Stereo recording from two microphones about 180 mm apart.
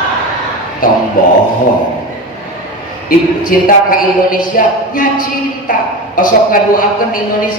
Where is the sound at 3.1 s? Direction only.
50° left (ahead or behind).